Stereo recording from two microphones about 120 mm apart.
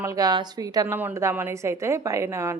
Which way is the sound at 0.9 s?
20° right (ahead or behind).